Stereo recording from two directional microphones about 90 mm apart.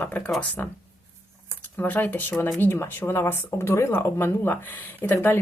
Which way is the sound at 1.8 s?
20° left (ahead or behind).